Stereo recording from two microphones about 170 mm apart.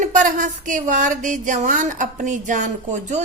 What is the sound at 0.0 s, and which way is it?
A woman's voice, 50° right (ahead or behind).